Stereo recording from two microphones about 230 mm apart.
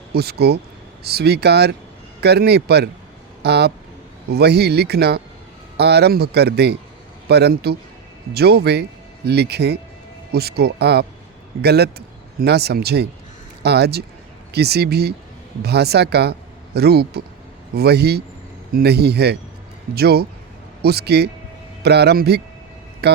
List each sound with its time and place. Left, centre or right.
0.1 s speech: right